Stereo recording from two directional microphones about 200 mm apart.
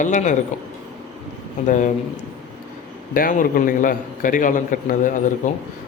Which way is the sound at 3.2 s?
45° left (ahead or behind).